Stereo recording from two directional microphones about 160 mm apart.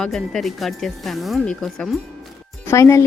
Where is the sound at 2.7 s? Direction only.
20° left (ahead or behind).